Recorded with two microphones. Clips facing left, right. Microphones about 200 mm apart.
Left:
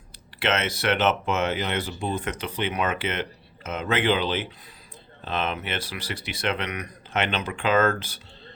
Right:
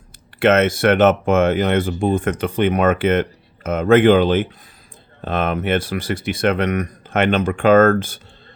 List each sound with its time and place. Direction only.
0.3 s speech: 50° right (ahead or behind)